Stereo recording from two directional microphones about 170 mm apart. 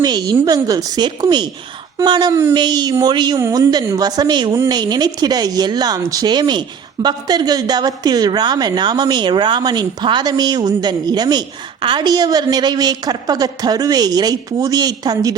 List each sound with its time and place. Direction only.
0.0 s speech: 25° right (ahead or behind)
2.3 s speech: 15° right (ahead or behind)